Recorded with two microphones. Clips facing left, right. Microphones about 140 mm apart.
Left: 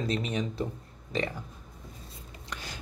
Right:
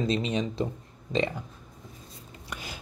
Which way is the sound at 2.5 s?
10° right (ahead or behind).